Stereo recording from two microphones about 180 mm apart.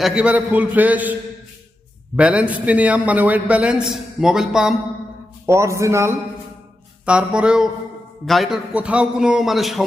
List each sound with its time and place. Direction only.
0.0 s a man's voice: 5° right (ahead or behind)
2.1 s a man's voice: 5° right (ahead or behind)
5.5 s a man's voice: 15° right (ahead or behind)